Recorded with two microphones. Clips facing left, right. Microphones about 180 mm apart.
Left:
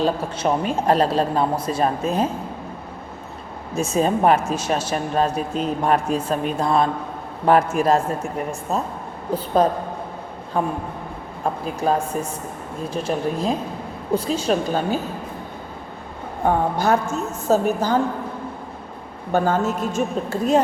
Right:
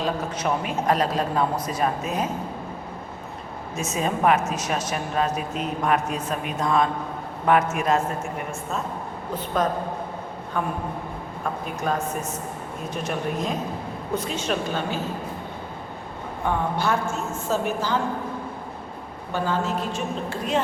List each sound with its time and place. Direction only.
0.0 s a man's voice: 30° left (ahead or behind)
3.8 s a woman's voice: 30° left (ahead or behind)
16.4 s a woman's voice: 40° left (ahead or behind)
19.3 s a woman's voice: 45° left (ahead or behind)